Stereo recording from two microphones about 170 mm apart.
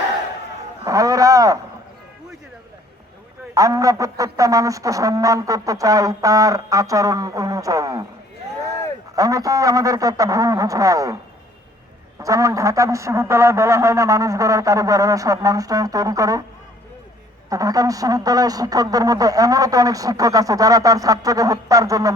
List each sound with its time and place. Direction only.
0.9 s a sound: 20° right (ahead or behind)
3.5 s speech: 20° right (ahead or behind)
9.1 s speech: 20° right (ahead or behind)
12.2 s speech: 20° right (ahead or behind)
17.5 s speech: 20° right (ahead or behind)